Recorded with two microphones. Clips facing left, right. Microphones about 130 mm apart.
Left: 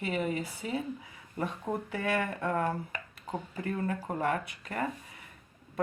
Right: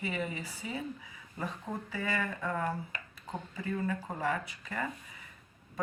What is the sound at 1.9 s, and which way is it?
Speech, 65° left (ahead or behind).